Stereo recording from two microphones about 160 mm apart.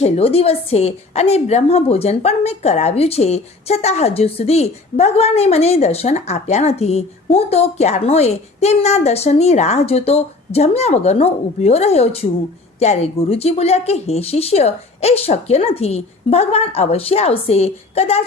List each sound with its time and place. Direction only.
0.0 s a woman's voice: 35° left (ahead or behind)